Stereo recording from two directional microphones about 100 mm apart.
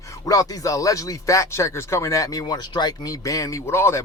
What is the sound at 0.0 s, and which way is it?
Speech, 35° left (ahead or behind).